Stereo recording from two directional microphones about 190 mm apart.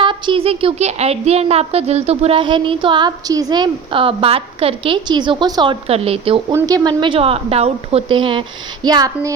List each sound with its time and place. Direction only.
0.0 s speech: 25° right (ahead or behind)
6.5 s speech: 15° right (ahead or behind)